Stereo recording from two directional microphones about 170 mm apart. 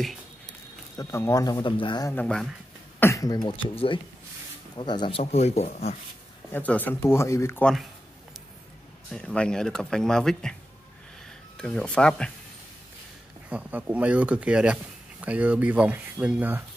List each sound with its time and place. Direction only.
0.9 s speech: 20° left (ahead or behind)
2.1 s speech: 5° left (ahead or behind)
3.0 s speech: 20° left (ahead or behind); by 5.9 s 40° left (ahead or behind)
6.5 s speech: 10° left (ahead or behind)
9.1 s speech: 5° left (ahead or behind)
13.5 s speech: 10° right (ahead or behind)